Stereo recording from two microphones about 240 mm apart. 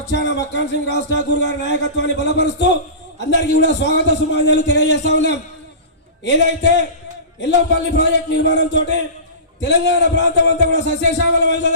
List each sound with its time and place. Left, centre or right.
0.1 s speech: left